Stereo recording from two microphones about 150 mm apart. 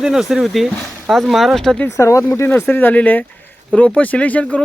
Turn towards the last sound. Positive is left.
turn(degrees=10)  # may be behind; listen again after turning